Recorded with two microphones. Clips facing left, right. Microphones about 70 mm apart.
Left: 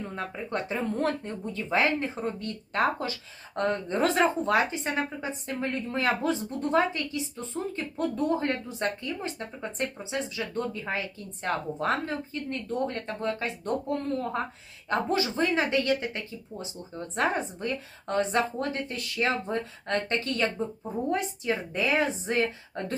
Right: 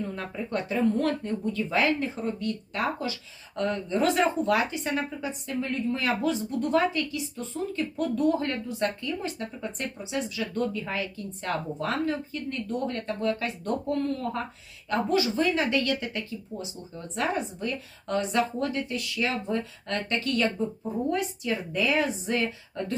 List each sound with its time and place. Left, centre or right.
0.2 s speech: left